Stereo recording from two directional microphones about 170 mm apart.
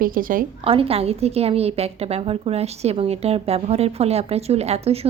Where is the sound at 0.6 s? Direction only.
35° right (ahead or behind).